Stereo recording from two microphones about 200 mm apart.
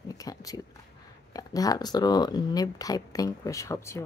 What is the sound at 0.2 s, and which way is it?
Speech, 20° left (ahead or behind).